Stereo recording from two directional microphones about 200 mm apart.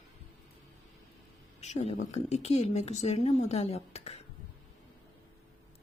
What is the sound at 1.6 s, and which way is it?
Speech, 35° left (ahead or behind).